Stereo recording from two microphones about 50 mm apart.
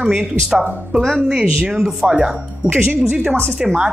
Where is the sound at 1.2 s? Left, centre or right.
Centre.